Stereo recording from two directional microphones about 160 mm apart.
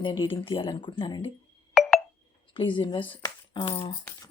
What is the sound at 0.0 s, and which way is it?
Speech, 30° left (ahead or behind).